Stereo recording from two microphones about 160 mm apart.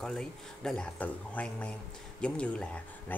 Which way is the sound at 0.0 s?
5° left (ahead or behind).